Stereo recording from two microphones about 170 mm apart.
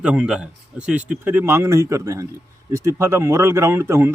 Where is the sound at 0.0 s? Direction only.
5° right (ahead or behind).